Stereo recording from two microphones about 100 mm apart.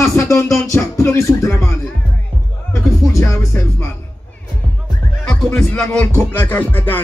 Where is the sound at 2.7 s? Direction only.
30° left (ahead or behind).